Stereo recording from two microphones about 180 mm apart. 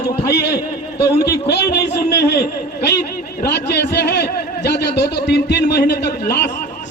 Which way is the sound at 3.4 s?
65° left (ahead or behind).